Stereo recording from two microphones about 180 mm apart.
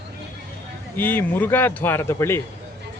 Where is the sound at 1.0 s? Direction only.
10° left (ahead or behind).